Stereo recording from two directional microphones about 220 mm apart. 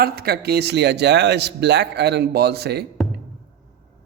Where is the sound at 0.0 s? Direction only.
45° right (ahead or behind).